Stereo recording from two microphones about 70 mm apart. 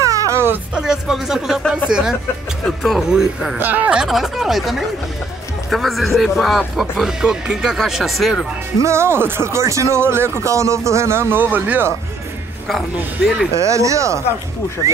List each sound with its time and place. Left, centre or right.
0.0 s a sound: right
0.7 s music: centre
1.7 s a woman's voice: centre
2.8 s a woman's voice: centre
3.5 s speech: right
4.0 s speech: centre
8.8 s speech: right
13.5 s speech: right